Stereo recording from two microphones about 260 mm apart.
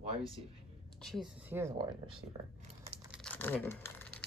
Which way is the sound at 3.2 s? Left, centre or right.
Centre.